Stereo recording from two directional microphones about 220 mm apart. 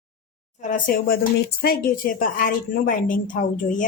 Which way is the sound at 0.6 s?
35° left (ahead or behind).